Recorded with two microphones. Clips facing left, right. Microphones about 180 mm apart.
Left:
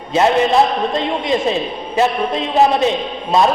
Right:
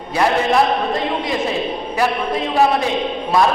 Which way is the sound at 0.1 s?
25° left (ahead or behind).